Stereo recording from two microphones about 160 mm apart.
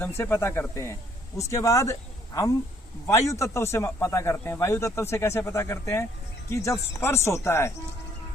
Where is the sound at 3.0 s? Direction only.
15° left (ahead or behind).